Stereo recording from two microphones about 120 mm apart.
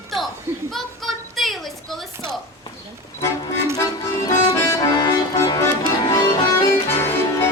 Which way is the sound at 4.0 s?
25° left (ahead or behind).